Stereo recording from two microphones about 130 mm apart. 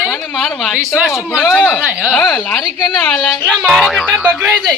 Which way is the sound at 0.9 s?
Centre (ahead or behind).